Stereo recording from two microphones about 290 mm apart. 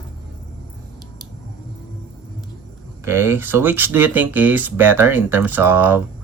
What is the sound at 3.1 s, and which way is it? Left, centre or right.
Speech, centre.